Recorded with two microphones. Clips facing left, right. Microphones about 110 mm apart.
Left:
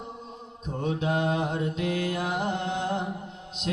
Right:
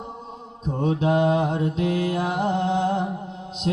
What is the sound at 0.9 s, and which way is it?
Mantra, 45° right (ahead or behind).